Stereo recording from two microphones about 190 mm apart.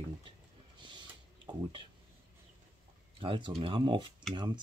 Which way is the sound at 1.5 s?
25° right (ahead or behind).